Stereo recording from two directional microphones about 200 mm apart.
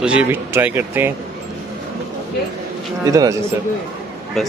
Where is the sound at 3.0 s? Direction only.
15° right (ahead or behind).